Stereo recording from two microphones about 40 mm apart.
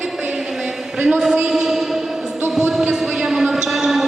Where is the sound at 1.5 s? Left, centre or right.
Centre.